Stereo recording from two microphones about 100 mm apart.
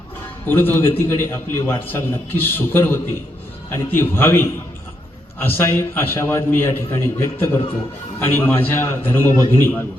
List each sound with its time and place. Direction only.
0.4 s a man's voice: 20° left (ahead or behind)